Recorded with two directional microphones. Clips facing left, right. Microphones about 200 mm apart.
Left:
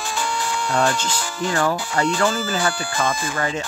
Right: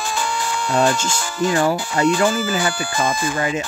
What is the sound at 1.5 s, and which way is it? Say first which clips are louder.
Speech: right 2 dB; 20° right (ahead or behind).